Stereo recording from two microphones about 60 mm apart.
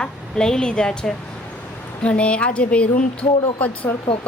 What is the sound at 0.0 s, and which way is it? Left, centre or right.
A woman's voice, centre.